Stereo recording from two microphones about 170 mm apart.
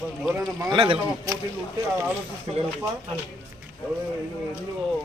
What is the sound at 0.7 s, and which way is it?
Speech, 30° right (ahead or behind).